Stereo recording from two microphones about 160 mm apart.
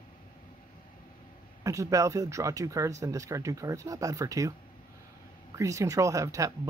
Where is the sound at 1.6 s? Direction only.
20° right (ahead or behind).